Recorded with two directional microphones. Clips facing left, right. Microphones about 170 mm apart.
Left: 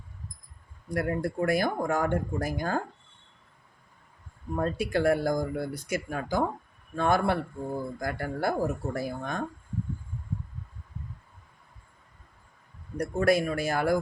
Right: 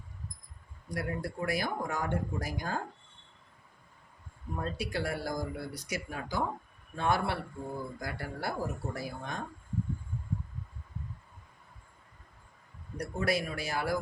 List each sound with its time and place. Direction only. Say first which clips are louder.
0.9 s speech: left 7 dB; 55° left (ahead or behind)
4.5 s speech: left 8 dB; 55° left (ahead or behind)
13.0 s speech: left 7 dB; 50° left (ahead or behind)